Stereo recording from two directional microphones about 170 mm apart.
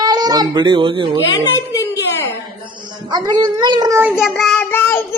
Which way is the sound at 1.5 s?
20° left (ahead or behind).